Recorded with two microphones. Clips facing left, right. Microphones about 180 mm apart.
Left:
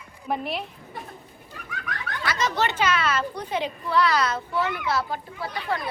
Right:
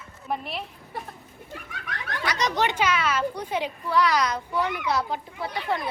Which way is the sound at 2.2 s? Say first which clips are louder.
Even; 20° right (ahead or behind).